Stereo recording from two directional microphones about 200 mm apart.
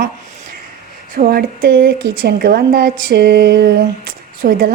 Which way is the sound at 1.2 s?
50° right (ahead or behind).